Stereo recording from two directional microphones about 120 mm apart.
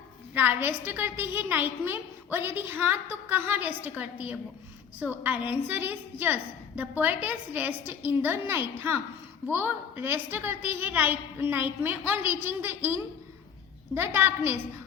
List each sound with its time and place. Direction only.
0.3 s a woman's voice: 15° right (ahead or behind)